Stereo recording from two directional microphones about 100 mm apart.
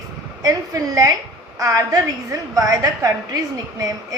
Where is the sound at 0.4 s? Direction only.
35° right (ahead or behind).